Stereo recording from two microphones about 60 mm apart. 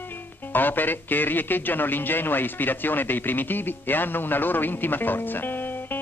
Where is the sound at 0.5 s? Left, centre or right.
Left.